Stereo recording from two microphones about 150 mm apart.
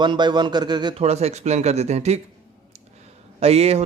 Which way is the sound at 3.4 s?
45° right (ahead or behind).